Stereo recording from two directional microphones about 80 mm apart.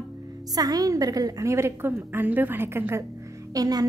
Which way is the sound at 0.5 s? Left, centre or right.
Right.